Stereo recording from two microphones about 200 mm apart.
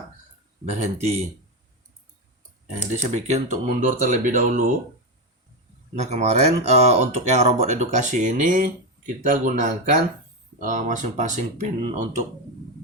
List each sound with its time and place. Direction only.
0.6 s speech: 35° right (ahead or behind)
2.7 s speech: 35° right (ahead or behind)
6.0 s speech: 35° right (ahead or behind)